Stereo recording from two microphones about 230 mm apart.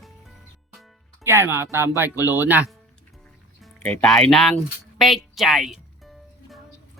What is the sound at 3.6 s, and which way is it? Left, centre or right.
Speech, centre.